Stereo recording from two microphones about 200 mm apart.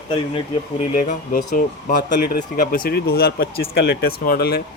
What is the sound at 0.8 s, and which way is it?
A man's voice, 40° left (ahead or behind).